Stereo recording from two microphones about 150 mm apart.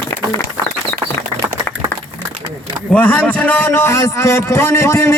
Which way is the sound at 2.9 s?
10° left (ahead or behind).